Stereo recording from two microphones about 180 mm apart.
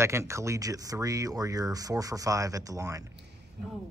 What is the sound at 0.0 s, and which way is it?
Speech, 15° right (ahead or behind).